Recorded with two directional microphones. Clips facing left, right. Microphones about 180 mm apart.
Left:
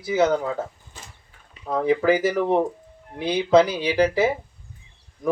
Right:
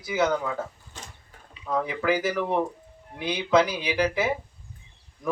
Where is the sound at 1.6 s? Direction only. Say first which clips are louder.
Left 6 dB; 35° left (ahead or behind).